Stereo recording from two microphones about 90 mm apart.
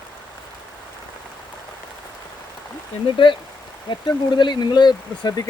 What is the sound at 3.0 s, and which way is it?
Speech, 70° left (ahead or behind).